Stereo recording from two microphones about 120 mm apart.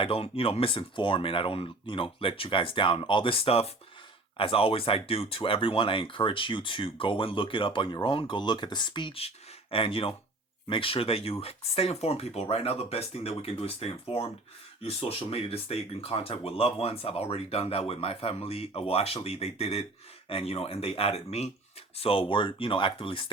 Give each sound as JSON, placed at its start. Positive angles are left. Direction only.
{"t": 0.0, "sound": "speech", "side_deg": 50}